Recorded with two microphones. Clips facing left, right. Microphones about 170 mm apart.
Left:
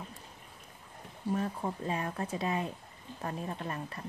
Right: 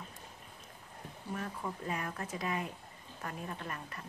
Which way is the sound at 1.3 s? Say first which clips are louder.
Left 6 dB; 30° left (ahead or behind).